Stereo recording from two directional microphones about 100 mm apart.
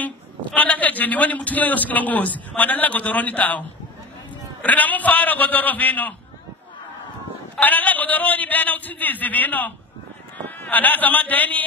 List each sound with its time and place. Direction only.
0.6 s a man's voice: 15° left (ahead or behind)
7.6 s a man's voice: 15° left (ahead or behind)